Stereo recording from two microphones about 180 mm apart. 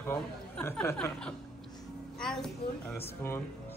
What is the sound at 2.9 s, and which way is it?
Speech, 15° left (ahead or behind).